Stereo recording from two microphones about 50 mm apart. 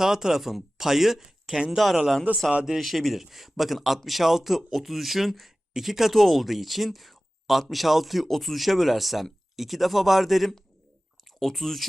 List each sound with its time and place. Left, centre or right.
0.0 s speech: centre
2.5 s a man's voice: right
2.7 s a man's voice: centre